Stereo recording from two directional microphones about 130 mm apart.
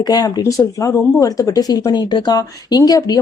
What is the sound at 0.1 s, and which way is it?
A woman's voice, 30° left (ahead or behind).